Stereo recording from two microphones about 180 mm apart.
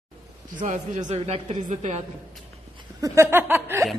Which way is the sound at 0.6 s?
40° right (ahead or behind).